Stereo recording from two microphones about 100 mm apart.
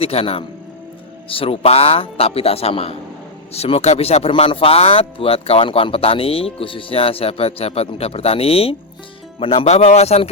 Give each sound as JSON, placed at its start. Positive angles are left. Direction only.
{"t": 0.0, "sound": "a man's voice", "side_deg": 80}
{"t": 1.3, "sound": "a man's voice", "side_deg": 70}
{"t": 4.4, "sound": "a man's voice", "side_deg": 65}